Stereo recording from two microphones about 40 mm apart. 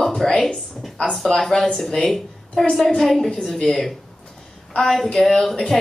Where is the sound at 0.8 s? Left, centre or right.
Centre.